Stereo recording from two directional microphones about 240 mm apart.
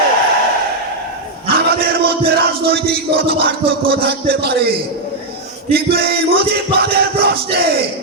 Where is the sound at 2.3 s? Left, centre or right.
Right.